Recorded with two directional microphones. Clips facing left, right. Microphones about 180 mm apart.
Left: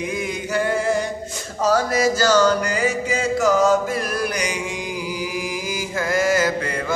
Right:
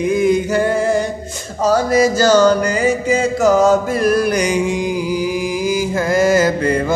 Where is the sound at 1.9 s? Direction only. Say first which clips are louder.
Right 6 dB; 20° right (ahead or behind).